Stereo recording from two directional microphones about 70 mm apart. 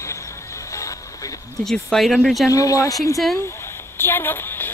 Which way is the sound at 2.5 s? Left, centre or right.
Left.